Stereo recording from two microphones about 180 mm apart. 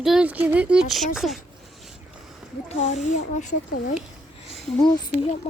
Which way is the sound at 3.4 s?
40° left (ahead or behind).